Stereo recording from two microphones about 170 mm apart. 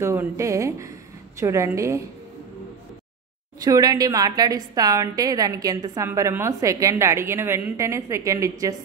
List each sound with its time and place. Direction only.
0.0 s a woman's voice: 15° right (ahead or behind)
3.5 s a woman's voice: 20° right (ahead or behind)